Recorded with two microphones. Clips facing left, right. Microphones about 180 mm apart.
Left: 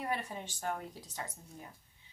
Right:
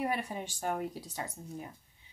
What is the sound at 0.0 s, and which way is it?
Speech, 10° right (ahead or behind).